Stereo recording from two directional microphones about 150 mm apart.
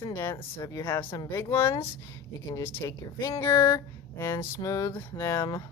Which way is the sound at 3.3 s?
20° left (ahead or behind).